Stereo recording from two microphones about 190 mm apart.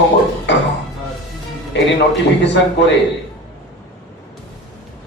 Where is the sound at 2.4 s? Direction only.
65° left (ahead or behind).